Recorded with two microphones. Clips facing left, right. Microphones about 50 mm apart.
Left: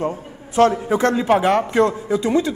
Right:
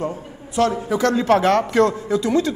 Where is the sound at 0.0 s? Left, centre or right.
Left.